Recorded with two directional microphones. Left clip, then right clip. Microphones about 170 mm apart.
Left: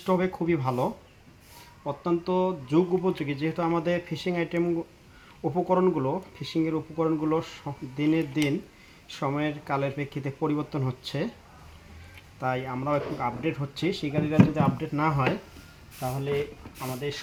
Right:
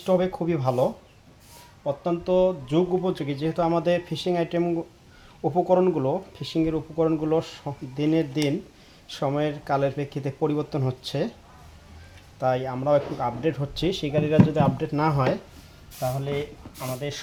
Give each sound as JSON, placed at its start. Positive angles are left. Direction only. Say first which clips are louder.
{"t": 0.0, "sound": "speech", "louder": "right 3 dB", "side_deg": -35}
{"t": 12.4, "sound": "speech", "louder": "right 5 dB", "side_deg": -40}